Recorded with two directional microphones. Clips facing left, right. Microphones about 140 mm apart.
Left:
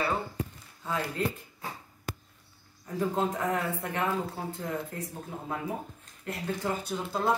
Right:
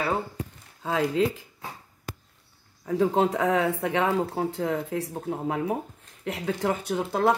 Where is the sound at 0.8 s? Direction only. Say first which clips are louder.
Right 7 dB; 90° right.